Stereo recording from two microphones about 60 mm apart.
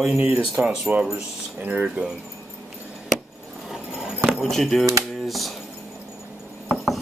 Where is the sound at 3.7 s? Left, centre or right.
Centre.